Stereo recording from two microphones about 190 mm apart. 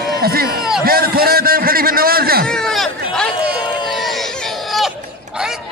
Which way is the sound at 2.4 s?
5° left (ahead or behind).